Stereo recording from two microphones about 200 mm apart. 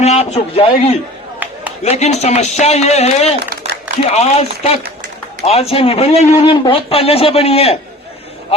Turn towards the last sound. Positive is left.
turn(degrees=30)  # may be behind; listen again after turning